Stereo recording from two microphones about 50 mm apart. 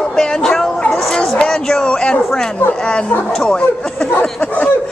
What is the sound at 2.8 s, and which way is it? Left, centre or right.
Speech, centre.